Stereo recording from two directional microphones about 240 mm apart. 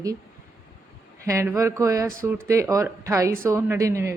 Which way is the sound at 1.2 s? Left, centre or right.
Centre.